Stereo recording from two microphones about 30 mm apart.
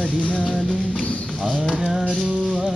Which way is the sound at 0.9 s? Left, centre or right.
Left.